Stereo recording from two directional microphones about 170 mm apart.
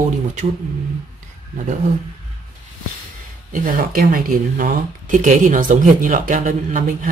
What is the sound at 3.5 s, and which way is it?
Speech, 55° right (ahead or behind).